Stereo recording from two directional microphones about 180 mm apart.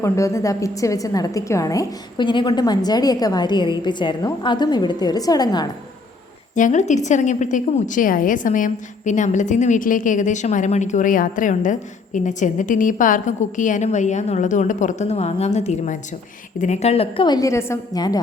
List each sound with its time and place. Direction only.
0.0 s a woman's voice: 15° left (ahead or behind)
6.6 s a woman's voice: 40° left (ahead or behind); by 18.2 s 20° left (ahead or behind)